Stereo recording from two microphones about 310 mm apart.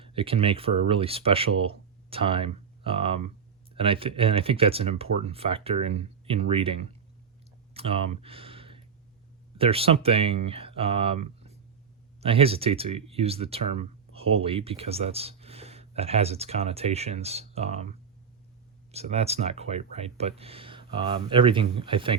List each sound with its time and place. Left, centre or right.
0.0 s speech: centre
7.7 s a sound: centre
9.6 s speech: centre